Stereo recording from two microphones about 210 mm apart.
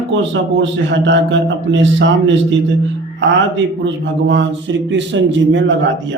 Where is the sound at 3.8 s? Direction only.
60° right (ahead or behind).